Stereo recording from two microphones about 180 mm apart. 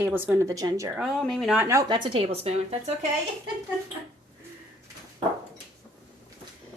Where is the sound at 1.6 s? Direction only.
15° right (ahead or behind); by 3.1 s 35° right (ahead or behind).